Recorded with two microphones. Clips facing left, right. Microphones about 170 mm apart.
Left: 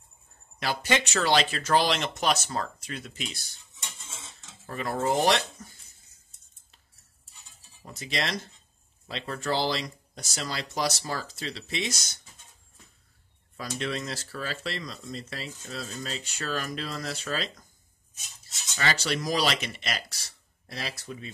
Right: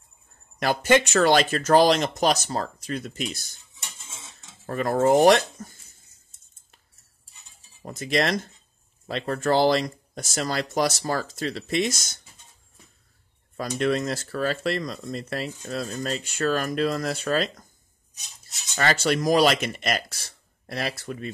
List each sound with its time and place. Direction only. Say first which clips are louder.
0.6 s speech: right 7 dB; 50° right (ahead or behind)
4.6 s speech: right 7 dB; 45° right (ahead or behind)
7.8 s speech: right 8 dB; 50° right (ahead or behind)
13.7 s speech: right 9 dB; 50° right (ahead or behind)
18.8 s speech: right 6 dB; 50° right (ahead or behind)